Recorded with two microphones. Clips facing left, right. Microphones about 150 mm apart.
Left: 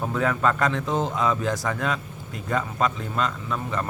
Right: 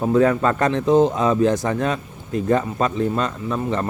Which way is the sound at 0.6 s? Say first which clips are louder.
Right 8 dB; 20° right (ahead or behind).